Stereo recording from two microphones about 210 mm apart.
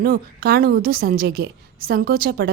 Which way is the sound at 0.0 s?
45° right (ahead or behind).